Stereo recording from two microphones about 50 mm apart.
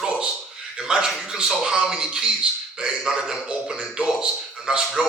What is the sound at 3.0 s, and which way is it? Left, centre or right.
A man's voice, centre.